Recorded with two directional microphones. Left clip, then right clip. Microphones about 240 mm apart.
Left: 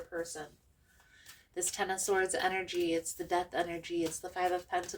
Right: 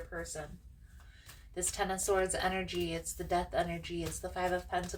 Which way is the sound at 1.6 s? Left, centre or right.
Left.